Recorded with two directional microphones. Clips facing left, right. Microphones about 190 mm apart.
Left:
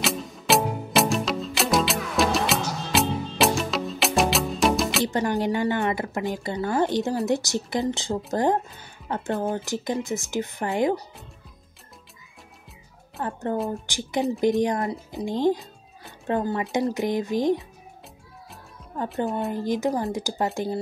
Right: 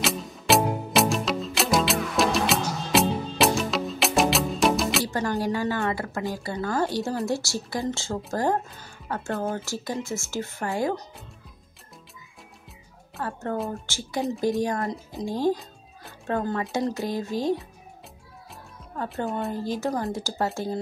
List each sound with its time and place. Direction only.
0.0 s music: centre (ahead or behind)
5.0 s a woman's voice: 20° left (ahead or behind)
13.2 s a woman's voice: 20° left (ahead or behind)
19.5 s a woman's voice: 15° left (ahead or behind)